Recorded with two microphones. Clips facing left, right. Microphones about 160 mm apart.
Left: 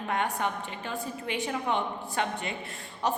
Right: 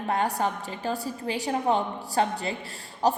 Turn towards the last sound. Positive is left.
turn(degrees=-35)  # may be behind; listen again after turning